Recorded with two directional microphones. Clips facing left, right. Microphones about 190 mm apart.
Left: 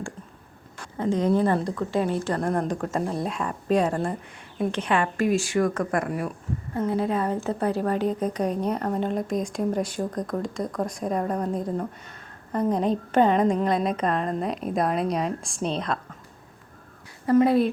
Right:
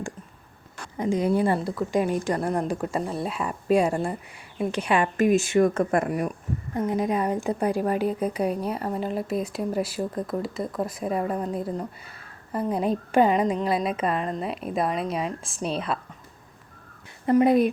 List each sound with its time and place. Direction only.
0.9 s a woman's voice: 10° right (ahead or behind)
17.2 s speech: 20° right (ahead or behind)